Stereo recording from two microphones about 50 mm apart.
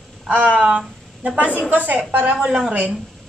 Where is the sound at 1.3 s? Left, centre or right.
Right.